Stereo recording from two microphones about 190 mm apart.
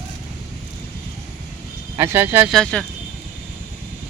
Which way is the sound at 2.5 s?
5° left (ahead or behind).